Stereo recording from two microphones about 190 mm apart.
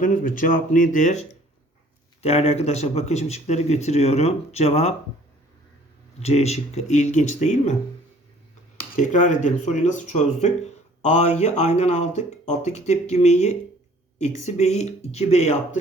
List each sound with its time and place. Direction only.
0.0 s speech: 45° left (ahead or behind)
6.2 s speech: 35° left (ahead or behind)
9.0 s speech: 40° left (ahead or behind)